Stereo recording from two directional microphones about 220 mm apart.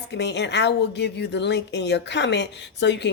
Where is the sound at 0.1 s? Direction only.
50° left (ahead or behind).